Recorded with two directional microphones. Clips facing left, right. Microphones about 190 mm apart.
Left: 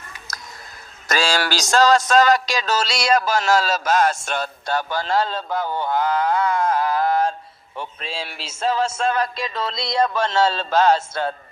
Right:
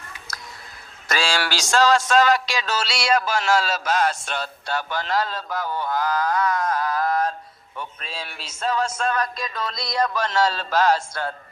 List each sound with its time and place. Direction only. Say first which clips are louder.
0.3 s a sound: left 2 dB; 45° left (ahead or behind)
1.0 s music: left 3 dB; 40° left (ahead or behind); by 7.3 s 25° left (ahead or behind)
7.8 s speech: left 4 dB; 25° left (ahead or behind)